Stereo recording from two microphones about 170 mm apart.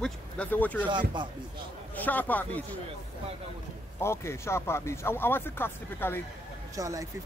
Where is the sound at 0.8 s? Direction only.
25° right (ahead or behind).